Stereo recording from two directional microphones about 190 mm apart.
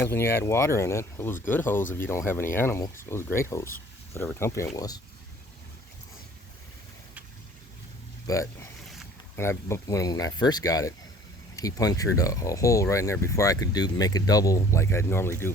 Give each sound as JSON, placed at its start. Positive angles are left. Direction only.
{"t": 0.0, "sound": "speech", "side_deg": 10}
{"t": 8.3, "sound": "speech", "side_deg": 20}